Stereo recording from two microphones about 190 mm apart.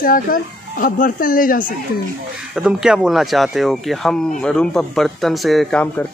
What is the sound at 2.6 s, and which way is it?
Speech, 5° right (ahead or behind).